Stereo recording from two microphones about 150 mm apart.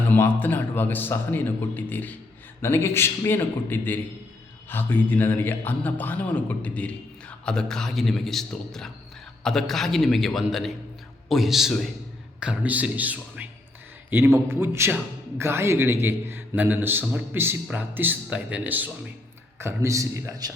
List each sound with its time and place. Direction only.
0.1 s a man's voice: 15° left (ahead or behind); by 20.5 s 20° right (ahead or behind)